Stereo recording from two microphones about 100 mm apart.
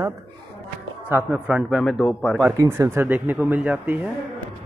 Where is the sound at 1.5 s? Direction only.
10° right (ahead or behind).